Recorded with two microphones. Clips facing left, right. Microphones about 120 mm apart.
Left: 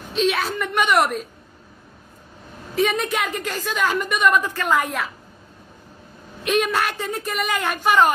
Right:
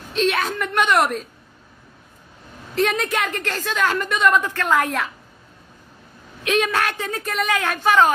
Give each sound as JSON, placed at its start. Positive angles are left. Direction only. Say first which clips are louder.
{"t": 0.1, "sound": "a woman's voice", "louder": "even", "side_deg": 0}
{"t": 2.7, "sound": "a woman's voice", "louder": "even", "side_deg": 5}
{"t": 6.4, "sound": "a woman's voice", "louder": "even", "side_deg": 5}